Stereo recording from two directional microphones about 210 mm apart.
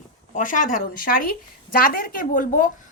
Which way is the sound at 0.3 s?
40° left (ahead or behind).